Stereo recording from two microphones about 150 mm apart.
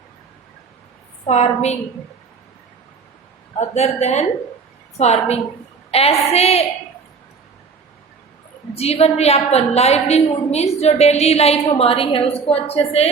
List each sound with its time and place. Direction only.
1.3 s a woman's voice: 45° left (ahead or behind)
3.6 s a woman's voice: 45° left (ahead or behind)
8.7 s a woman's voice: 45° left (ahead or behind)